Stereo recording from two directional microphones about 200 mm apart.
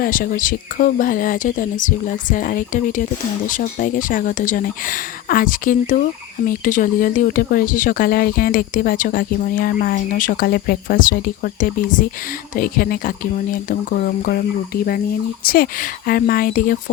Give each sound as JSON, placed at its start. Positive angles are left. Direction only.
{"t": 0.0, "sound": "speech", "side_deg": 45}